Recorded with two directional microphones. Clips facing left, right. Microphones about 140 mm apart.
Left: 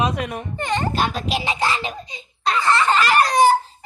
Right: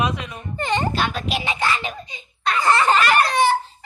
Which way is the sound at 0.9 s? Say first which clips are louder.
Left 1 dB; 40° left (ahead or behind).